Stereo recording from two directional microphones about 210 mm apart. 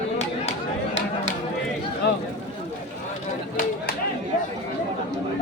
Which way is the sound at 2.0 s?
50° left (ahead or behind).